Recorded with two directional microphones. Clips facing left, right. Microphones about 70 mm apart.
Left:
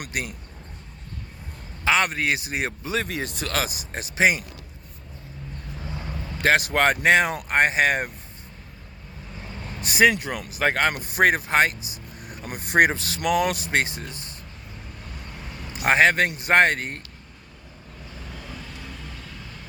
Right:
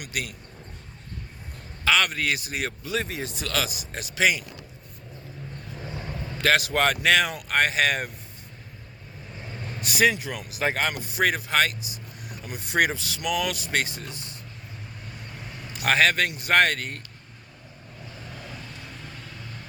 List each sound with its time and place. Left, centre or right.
0.0 s speech: left
1.8 s a man's voice: left
3.0 s speech: left
6.6 s speech: left
9.8 s speech: left
10.1 s speech: left
13.7 s speech: left
15.8 s a man's voice: left
18.4 s vehicle: centre